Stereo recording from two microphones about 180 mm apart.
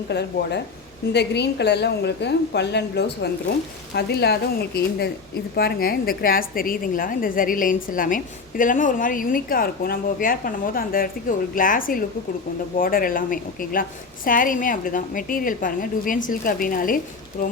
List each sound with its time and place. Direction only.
0.1 s a woman's voice: 65° left (ahead or behind); by 17.5 s 50° left (ahead or behind)